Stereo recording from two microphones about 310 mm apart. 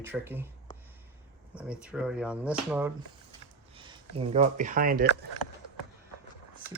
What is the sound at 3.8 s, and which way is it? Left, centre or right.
Speech, centre.